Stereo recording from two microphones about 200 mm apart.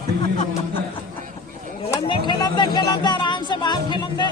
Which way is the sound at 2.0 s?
25° left (ahead or behind).